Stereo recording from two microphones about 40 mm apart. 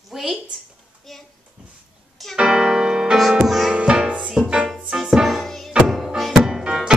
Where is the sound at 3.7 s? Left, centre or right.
Right.